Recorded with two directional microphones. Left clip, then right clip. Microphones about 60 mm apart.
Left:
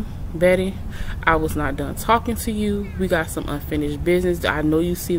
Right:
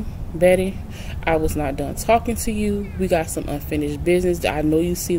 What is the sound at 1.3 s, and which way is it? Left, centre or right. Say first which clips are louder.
Speech: even; centre.